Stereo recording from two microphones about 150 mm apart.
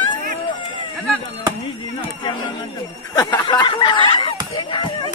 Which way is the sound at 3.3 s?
30° left (ahead or behind).